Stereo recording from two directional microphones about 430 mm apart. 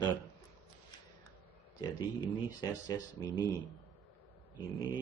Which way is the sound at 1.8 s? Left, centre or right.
Centre.